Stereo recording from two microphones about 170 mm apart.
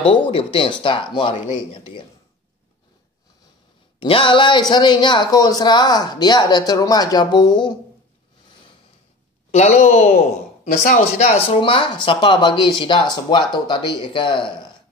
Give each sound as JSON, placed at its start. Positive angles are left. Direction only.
{"t": 0.3, "sound": "speech", "side_deg": 30}
{"t": 4.0, "sound": "speech", "side_deg": 30}
{"t": 9.5, "sound": "speech", "side_deg": 40}